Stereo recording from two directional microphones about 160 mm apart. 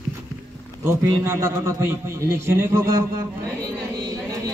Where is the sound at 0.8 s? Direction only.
20° right (ahead or behind).